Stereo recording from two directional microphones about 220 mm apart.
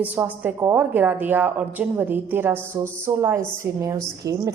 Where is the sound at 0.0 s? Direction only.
5° right (ahead or behind).